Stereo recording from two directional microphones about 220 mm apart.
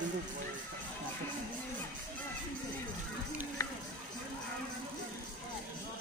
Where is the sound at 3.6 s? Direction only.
15° left (ahead or behind).